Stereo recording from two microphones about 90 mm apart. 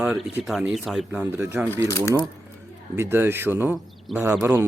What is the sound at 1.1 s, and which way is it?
Speech, 25° right (ahead or behind).